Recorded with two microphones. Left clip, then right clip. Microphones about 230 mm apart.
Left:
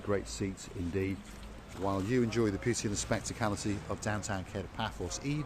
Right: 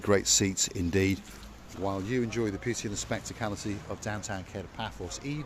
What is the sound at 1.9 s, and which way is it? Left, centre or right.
Speech, centre.